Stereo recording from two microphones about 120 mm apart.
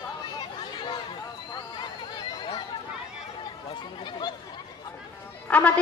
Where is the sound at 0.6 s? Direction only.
35° left (ahead or behind).